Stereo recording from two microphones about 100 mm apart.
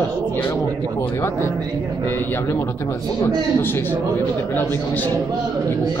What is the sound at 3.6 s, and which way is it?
Speech, 20° left (ahead or behind).